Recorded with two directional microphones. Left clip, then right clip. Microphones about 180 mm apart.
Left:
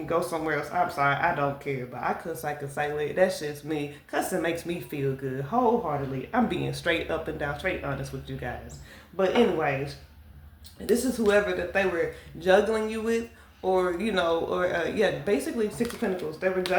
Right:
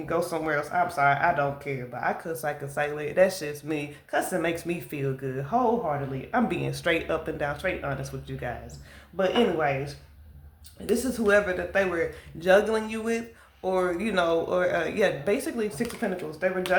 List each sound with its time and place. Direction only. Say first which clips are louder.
0.1 s speech: even; 25° right (ahead or behind)
11.2 s speech: right 3 dB; 30° right (ahead or behind)